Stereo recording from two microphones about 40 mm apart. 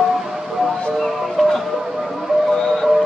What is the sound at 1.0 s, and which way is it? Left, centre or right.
Music, centre.